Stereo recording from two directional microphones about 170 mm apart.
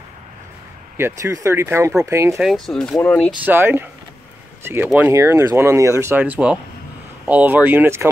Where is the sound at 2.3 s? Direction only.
Centre (ahead or behind).